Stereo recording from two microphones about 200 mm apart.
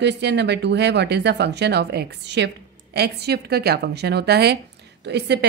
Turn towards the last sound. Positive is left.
turn(degrees=-55)  # may be behind; listen again after turning